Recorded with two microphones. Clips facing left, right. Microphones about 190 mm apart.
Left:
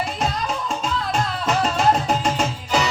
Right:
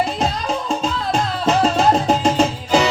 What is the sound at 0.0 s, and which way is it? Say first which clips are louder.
Music: right 4 dB; 25° right (ahead or behind).